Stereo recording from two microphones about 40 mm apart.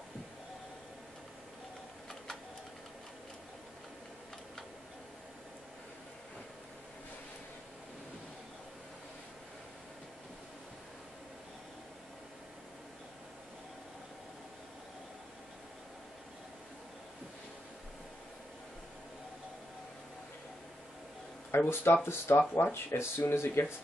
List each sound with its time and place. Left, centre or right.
21.5 s speech: left
22.5 s speech: left